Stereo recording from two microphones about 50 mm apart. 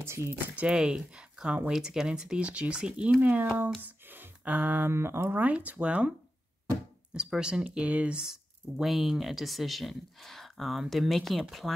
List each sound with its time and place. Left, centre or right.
0.0 s speech: right
0.7 s speech: centre; by 3.4 s right
3.8 s a sound: right
4.6 s speech: right
4.8 s speech: right
5.4 s speech: right
7.2 s speech: centre
7.7 s speech: right
8.2 s speech: centre